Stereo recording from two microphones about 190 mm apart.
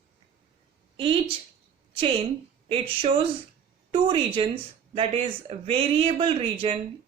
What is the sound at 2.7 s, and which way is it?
A woman's voice, 25° right (ahead or behind).